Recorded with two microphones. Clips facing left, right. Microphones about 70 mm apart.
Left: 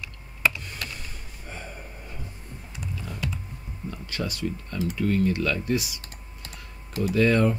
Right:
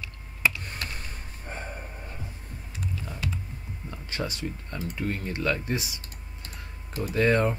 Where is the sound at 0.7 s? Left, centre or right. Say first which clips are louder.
Even; right.